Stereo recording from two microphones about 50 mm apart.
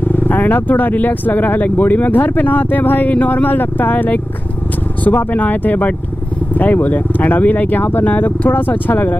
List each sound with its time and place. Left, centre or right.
0.1 s speech: left